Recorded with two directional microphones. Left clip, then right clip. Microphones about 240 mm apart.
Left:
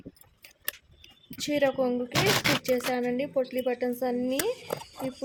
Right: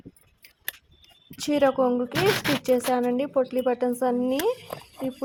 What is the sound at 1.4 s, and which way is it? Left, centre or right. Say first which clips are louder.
A woman's voice: right 4 dB; centre.